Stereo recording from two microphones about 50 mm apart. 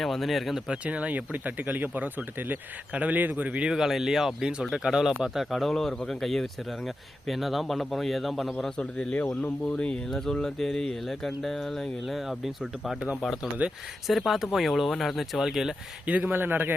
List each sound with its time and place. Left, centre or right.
0.0 s speech: centre
0.7 s speech: right
3.7 s speech: centre
5.5 s speech: centre
8.8 s speech: left
10.1 s speech: centre
16.0 s speech: right
16.3 s speech: right